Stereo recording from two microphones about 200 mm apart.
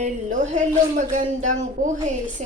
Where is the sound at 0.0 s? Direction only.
40° right (ahead or behind).